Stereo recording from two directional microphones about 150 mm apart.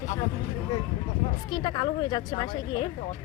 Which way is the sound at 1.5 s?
30° left (ahead or behind).